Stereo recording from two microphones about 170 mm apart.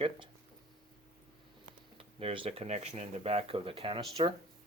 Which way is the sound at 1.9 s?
30° right (ahead or behind).